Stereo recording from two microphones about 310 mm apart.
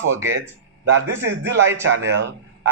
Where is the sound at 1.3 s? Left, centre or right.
Right.